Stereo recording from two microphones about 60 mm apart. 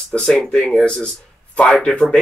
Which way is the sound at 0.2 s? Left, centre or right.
Centre.